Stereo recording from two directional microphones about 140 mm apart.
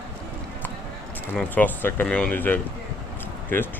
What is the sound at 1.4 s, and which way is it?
Speech, 10° left (ahead or behind).